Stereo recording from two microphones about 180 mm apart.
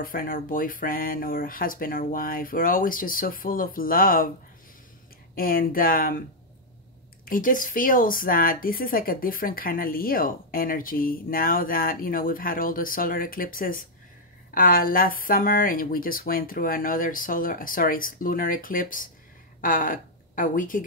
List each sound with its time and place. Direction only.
0.0 s speech: 50° left (ahead or behind)
5.3 s speech: 55° left (ahead or behind)
7.2 s a woman's voice: 50° left (ahead or behind)